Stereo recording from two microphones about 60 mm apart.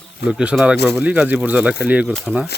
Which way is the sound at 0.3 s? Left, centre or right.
Centre.